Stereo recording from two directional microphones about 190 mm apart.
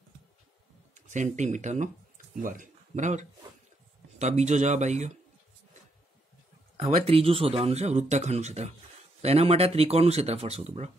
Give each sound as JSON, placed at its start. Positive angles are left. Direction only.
{"t": 0.9, "sound": "speech", "side_deg": -40}
{"t": 6.8, "sound": "speech", "side_deg": -30}